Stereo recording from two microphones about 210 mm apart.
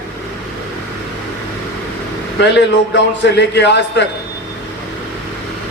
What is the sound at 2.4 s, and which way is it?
Speech, 55° left (ahead or behind).